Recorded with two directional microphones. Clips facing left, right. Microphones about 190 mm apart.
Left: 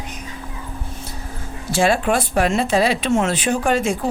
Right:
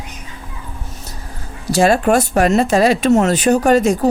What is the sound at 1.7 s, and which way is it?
Speech, 40° right (ahead or behind).